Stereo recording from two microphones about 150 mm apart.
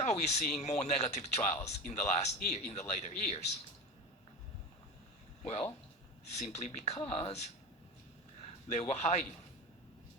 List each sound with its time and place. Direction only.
0.0 s speech: 50° left (ahead or behind)
6.3 s speech: 50° left (ahead or behind)
8.8 s speech: 50° left (ahead or behind)